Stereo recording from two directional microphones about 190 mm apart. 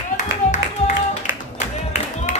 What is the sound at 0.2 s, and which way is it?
Music, 40° left (ahead or behind).